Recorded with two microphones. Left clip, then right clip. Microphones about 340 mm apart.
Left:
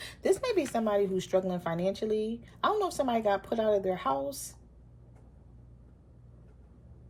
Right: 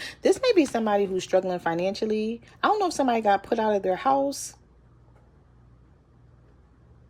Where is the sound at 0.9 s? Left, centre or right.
Right.